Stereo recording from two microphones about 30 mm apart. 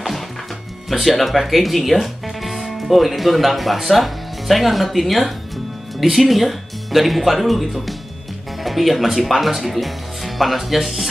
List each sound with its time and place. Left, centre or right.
0.8 s speech: centre